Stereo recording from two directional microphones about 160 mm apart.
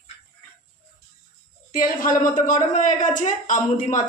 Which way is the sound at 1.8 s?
60° left (ahead or behind).